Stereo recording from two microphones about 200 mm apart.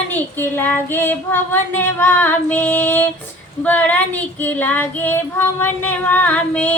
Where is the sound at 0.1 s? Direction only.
10° left (ahead or behind).